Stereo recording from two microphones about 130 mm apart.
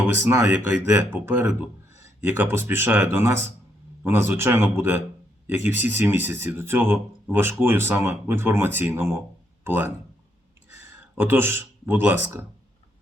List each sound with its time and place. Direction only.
0.1 s speech: 20° right (ahead or behind)